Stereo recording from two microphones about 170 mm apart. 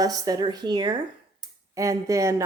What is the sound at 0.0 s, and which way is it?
A woman's voice, 20° right (ahead or behind).